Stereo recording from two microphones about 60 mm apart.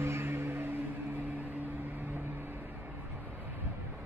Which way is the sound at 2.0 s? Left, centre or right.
Right.